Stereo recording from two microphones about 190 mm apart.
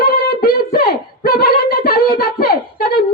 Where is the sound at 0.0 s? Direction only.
55° left (ahead or behind).